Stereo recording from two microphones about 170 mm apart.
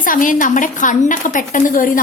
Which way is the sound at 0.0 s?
50° left (ahead or behind).